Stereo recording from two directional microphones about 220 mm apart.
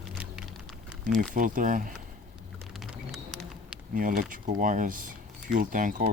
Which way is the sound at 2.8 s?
Centre (ahead or behind).